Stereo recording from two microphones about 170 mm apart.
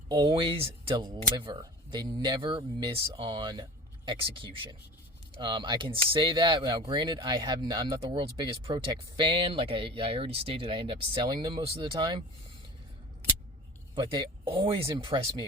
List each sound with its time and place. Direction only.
0.1 s speech: 30° right (ahead or behind)
13.9 s speech: 30° right (ahead or behind)